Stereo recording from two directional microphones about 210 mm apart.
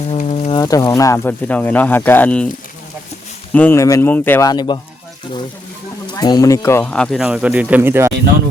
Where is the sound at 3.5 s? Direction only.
10° left (ahead or behind).